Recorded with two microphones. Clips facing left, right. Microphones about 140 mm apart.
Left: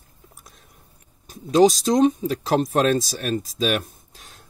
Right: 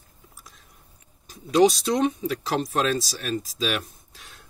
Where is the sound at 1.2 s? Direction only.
45° left (ahead or behind).